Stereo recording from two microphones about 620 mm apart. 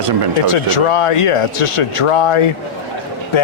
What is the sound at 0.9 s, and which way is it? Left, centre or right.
Speech, left.